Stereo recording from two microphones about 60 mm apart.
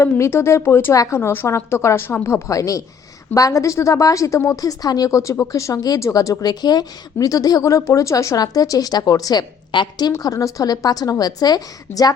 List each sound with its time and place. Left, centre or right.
0.0 s a woman's voice: left
2.5 s a woman's voice: left
7.2 s a woman's voice: left
10.1 s a woman's voice: left
11.9 s speech: left